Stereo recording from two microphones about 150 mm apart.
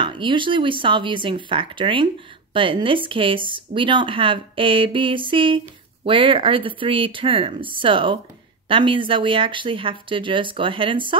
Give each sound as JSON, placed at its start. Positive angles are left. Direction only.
{"t": 0.0, "sound": "speech", "side_deg": -35}